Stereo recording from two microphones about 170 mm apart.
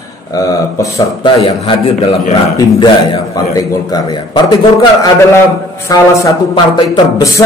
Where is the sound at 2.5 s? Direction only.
20° left (ahead or behind).